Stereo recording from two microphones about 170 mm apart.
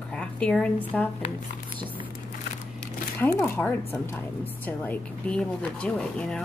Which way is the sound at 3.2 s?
10° left (ahead or behind).